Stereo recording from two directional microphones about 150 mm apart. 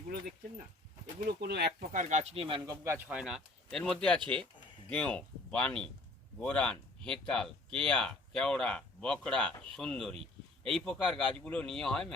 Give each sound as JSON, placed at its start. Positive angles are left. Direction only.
{"t": 1.2, "sound": "speech", "side_deg": -90}
{"t": 2.3, "sound": "speech", "side_deg": -40}
{"t": 2.6, "sound": "speech", "side_deg": -20}
{"t": 3.1, "sound": "speech", "side_deg": -5}